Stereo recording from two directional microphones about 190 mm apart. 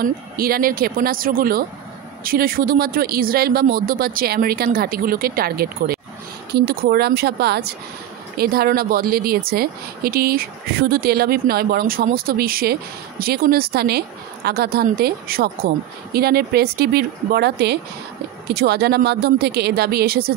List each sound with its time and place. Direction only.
0.0 s a woman's voice: 50° right (ahead or behind)